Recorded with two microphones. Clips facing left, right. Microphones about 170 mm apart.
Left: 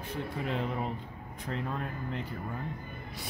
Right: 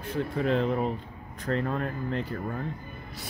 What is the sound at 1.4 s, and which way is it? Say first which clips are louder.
Speech: right 7 dB; 70° right (ahead or behind).